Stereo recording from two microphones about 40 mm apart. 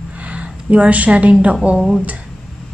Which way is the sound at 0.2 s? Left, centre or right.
Right.